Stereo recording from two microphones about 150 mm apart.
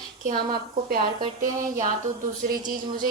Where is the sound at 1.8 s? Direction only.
60° right (ahead or behind).